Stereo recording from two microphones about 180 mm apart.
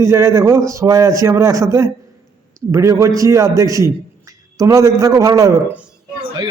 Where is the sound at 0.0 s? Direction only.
15° right (ahead or behind).